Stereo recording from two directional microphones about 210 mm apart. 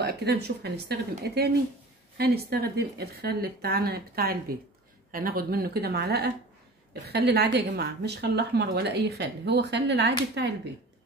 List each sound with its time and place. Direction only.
0.0 s a woman's voice: 50° right (ahead or behind)